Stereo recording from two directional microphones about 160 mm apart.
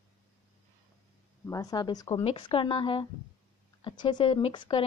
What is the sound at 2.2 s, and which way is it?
A woman's voice, 35° left (ahead or behind).